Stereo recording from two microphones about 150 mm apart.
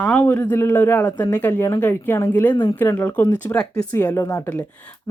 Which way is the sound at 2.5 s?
30° left (ahead or behind).